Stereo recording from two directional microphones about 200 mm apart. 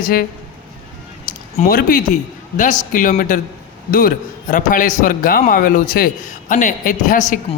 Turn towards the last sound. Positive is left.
turn(degrees=40)  # may be behind; listen again after turning